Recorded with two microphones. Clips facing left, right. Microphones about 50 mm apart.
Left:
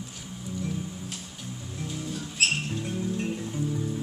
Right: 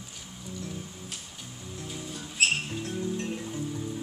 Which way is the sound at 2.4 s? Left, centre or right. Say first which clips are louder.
Even; centre.